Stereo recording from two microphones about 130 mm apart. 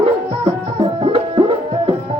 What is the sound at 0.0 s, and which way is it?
Music, 45° right (ahead or behind).